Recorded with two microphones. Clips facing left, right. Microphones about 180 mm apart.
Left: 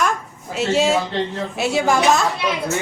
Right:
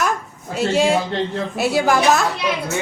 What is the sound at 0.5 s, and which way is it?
Speech, centre (ahead or behind).